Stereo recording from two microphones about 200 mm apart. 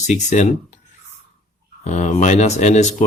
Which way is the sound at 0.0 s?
35° left (ahead or behind).